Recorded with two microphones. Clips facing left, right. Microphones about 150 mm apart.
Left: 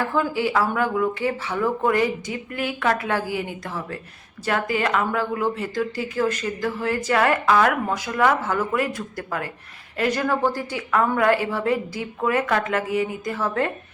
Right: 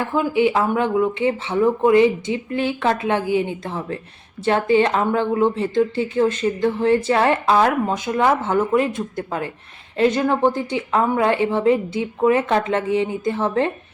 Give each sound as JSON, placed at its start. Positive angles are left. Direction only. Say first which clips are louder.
{"t": 0.0, "sound": "speech", "louder": "right 4 dB", "side_deg": -20}